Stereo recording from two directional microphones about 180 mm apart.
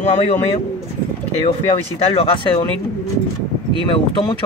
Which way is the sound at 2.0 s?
35° left (ahead or behind).